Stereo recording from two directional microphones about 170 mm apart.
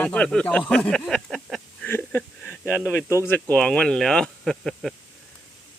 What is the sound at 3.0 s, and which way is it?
Speech, 10° right (ahead or behind).